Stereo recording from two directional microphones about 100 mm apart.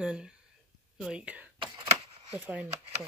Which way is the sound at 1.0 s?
10° right (ahead or behind).